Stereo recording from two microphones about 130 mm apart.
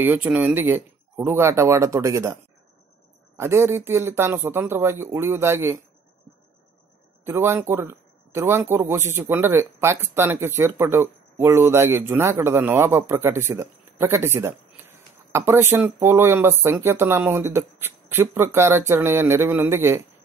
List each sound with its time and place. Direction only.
0.0 s speech: 15° right (ahead or behind)
3.3 s speech: 20° right (ahead or behind)
7.2 s speech: 20° right (ahead or behind)